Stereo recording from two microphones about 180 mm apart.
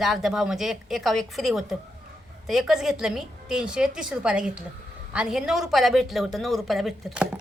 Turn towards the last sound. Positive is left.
turn(degrees=0)  # may be behind; listen again after turning